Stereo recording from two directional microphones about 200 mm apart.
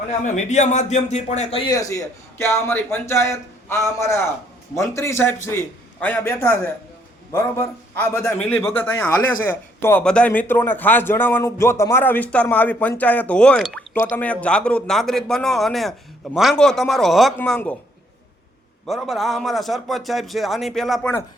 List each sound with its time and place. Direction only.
0.3 s speech: 35° left (ahead or behind)
1.7 s a man's voice: 15° left (ahead or behind)
18.9 s a man's voice: centre (ahead or behind)